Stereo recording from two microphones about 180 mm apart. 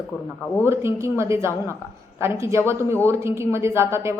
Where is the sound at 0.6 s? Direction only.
15° right (ahead or behind).